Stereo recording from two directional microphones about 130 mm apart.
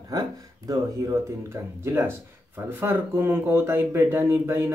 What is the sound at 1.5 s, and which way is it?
Speech, 20° right (ahead or behind).